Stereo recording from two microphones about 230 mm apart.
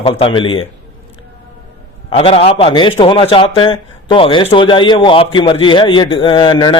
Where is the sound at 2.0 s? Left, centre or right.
Left.